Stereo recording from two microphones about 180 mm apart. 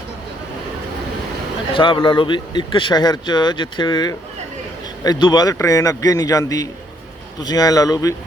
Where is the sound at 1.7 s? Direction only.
30° left (ahead or behind).